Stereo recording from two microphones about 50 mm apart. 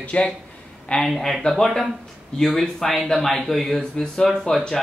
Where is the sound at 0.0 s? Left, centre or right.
Left.